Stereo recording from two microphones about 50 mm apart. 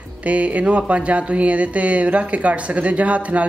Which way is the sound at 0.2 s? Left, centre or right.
Right.